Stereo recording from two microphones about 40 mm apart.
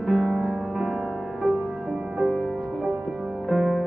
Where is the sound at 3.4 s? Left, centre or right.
Centre.